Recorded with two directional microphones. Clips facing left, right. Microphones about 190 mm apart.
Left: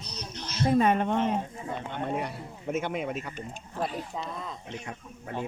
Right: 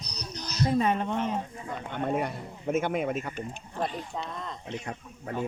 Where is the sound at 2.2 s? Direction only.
50° right (ahead or behind).